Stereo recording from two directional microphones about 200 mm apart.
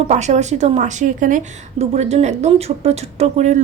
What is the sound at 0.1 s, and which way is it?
A woman's voice, 35° right (ahead or behind).